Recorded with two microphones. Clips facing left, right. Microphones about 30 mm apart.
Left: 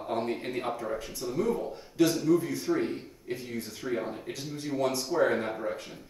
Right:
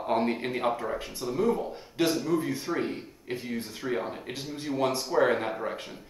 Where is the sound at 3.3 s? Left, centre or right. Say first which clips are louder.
Right 2 dB; right.